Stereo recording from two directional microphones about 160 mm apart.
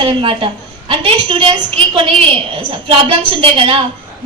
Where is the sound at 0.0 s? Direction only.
35° right (ahead or behind).